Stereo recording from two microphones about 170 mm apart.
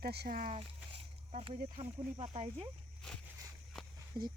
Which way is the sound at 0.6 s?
35° right (ahead or behind).